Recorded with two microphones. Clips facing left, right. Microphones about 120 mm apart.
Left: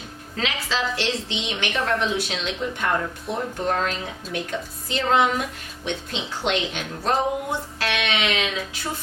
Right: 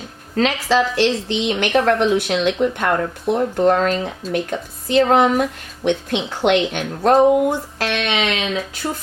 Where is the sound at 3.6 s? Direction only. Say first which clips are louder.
Right 9 dB; 55° right (ahead or behind).